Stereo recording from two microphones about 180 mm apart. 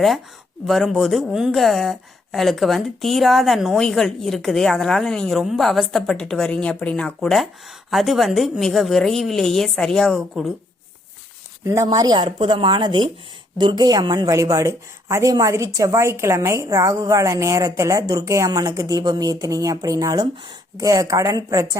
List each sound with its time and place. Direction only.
0.7 s a woman's voice: centre (ahead or behind)
11.6 s a woman's voice: 15° right (ahead or behind)